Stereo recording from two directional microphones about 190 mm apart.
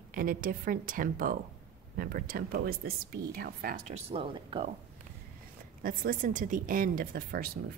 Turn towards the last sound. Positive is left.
turn(degrees=-50)  # may be behind; listen again after turning